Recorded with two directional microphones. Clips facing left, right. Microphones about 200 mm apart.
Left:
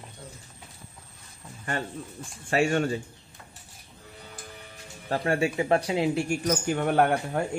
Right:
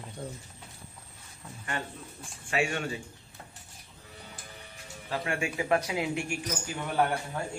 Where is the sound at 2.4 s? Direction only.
40° left (ahead or behind).